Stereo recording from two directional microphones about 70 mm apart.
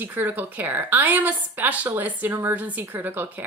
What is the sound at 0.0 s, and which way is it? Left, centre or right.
A woman's voice, right.